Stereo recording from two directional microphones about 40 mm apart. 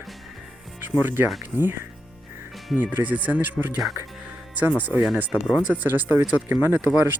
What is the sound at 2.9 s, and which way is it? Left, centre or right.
Speech, right.